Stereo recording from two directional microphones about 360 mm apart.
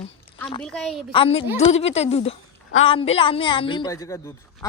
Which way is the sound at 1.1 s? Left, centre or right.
Centre.